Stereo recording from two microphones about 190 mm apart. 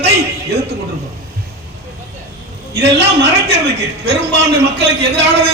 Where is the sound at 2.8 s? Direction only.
65° right (ahead or behind).